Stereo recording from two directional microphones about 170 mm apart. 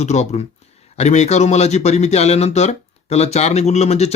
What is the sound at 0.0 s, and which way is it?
Speech, 40° left (ahead or behind).